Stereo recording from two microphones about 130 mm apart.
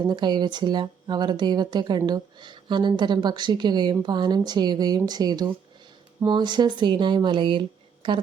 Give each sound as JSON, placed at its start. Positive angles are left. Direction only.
{"t": 0.0, "sound": "speech", "side_deg": -35}